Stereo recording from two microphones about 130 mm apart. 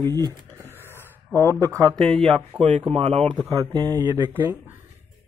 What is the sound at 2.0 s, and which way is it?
Speech, 5° left (ahead or behind).